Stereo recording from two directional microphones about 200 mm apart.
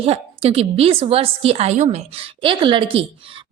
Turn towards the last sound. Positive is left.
turn(degrees=-25)  # may be behind; listen again after turning